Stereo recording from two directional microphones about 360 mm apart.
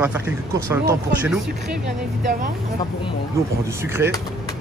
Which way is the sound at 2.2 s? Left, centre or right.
Right.